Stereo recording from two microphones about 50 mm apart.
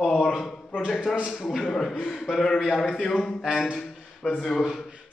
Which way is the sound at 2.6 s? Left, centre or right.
Left.